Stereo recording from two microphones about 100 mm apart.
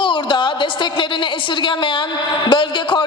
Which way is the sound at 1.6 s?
55° left (ahead or behind).